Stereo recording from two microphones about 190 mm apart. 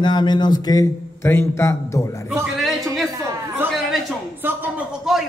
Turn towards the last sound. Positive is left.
turn(degrees=-5)  # may be behind; listen again after turning